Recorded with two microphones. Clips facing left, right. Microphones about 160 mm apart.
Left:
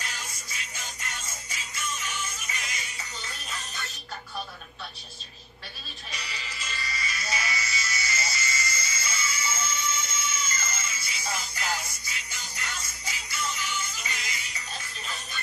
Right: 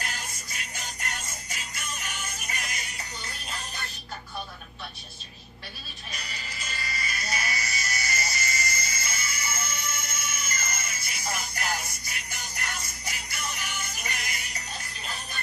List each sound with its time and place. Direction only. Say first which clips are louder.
0.0 s music: right 2 dB; 55° right (ahead or behind)
3.4 s music: right 1 dB; 35° right (ahead or behind)
6.1 s music: left 1 dB; 50° right (ahead or behind)